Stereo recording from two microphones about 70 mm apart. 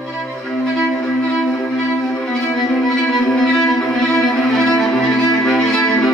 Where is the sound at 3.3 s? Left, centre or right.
Centre.